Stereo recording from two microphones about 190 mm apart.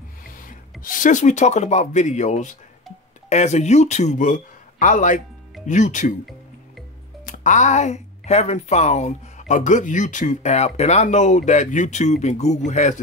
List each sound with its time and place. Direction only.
0.8 s speech: 45° left (ahead or behind)
7.2 s speech: 40° left (ahead or behind)